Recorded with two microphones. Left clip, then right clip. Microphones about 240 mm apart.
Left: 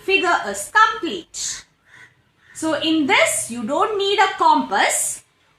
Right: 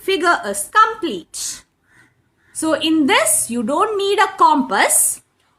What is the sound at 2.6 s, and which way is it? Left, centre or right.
A woman's voice, right.